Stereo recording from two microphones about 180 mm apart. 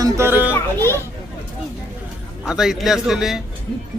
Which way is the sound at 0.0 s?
15° right (ahead or behind).